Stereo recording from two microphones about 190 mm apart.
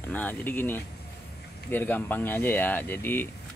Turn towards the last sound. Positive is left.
turn(degrees=10)  # may be behind; listen again after turning